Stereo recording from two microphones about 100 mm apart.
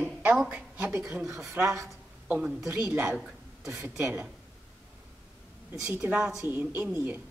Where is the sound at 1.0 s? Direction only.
5° right (ahead or behind).